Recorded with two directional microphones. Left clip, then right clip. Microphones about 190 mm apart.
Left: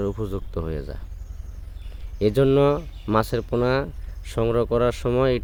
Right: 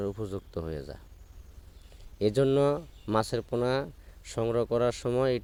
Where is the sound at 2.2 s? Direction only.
35° right (ahead or behind).